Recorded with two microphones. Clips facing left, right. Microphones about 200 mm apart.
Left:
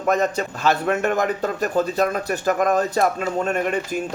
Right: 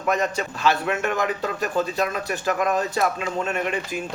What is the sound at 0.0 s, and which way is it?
A man's voice, 40° left (ahead or behind).